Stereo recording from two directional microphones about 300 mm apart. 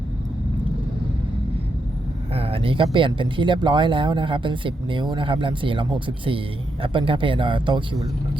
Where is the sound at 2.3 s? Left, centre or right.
Centre.